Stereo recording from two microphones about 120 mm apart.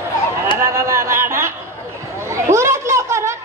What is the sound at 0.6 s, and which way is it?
Speech, 25° right (ahead or behind).